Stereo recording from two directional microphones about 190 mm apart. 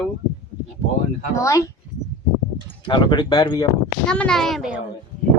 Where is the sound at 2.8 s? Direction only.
25° left (ahead or behind).